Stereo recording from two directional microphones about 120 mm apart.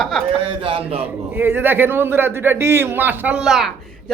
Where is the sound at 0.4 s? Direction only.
50° right (ahead or behind).